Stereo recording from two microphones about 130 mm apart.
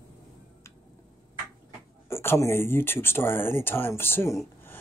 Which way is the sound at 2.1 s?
20° left (ahead or behind).